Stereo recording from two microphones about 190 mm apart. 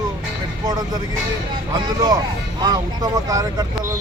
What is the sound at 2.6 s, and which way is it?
Speech, 20° right (ahead or behind).